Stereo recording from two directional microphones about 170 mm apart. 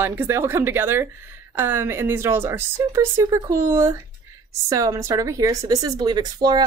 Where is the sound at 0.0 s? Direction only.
15° right (ahead or behind).